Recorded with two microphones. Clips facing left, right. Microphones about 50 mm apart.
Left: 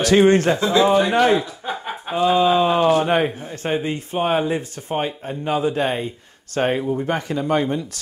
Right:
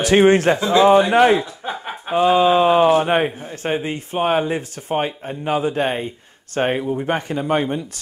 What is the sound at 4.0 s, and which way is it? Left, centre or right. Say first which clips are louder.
A man's voice: right 1 dB; right.